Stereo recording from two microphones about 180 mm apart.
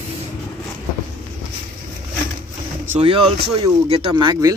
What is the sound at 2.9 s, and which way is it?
Speech, 30° right (ahead or behind).